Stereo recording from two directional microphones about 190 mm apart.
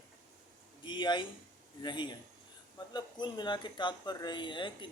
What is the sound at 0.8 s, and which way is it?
Speech, 25° left (ahead or behind).